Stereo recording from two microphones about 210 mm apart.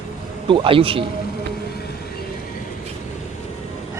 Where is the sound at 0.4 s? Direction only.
25° right (ahead or behind).